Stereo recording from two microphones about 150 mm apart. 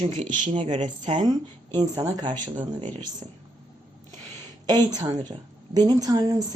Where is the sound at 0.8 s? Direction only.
50° right (ahead or behind).